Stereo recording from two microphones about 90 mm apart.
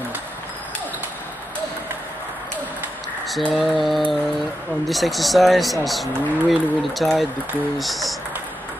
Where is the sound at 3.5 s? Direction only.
Centre (ahead or behind).